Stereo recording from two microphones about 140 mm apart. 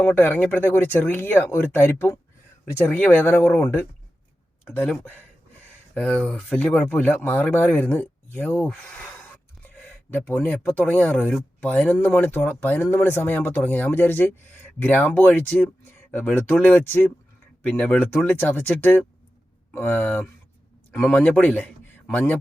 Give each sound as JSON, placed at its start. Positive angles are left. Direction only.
{"t": 0.0, "sound": "speech", "side_deg": 15}
{"t": 4.6, "sound": "speech", "side_deg": 10}